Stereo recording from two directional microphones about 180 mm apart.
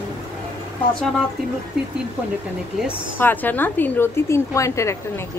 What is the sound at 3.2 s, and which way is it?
A woman's voice, 10° left (ahead or behind).